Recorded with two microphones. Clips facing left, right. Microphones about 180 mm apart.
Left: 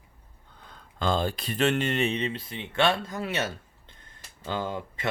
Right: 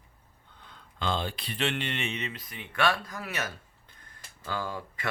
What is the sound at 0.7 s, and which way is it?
Speech, 40° left (ahead or behind).